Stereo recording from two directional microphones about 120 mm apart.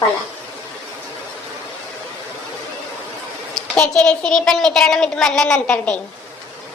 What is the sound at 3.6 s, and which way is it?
A child's voice, 5° left (ahead or behind).